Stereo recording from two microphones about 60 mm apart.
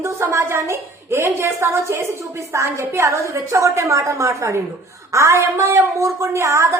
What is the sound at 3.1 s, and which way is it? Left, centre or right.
A woman's voice, right.